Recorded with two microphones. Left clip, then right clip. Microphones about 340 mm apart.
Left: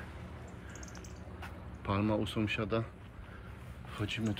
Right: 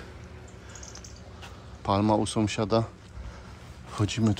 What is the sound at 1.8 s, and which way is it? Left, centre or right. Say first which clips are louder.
A man's voice: right 9 dB; centre.